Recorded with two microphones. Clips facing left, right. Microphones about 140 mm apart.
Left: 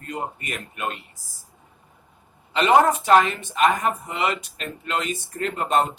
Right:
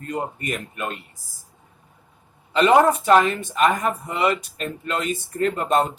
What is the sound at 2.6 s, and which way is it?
Speech, 45° right (ahead or behind).